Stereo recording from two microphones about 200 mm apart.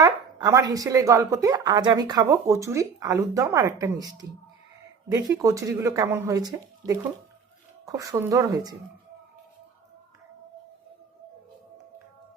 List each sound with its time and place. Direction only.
0.0 s a woman's voice: 20° right (ahead or behind)